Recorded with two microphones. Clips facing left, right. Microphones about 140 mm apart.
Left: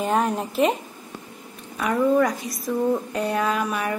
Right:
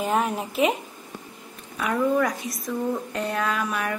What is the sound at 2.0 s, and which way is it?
A woman's voice, centre (ahead or behind).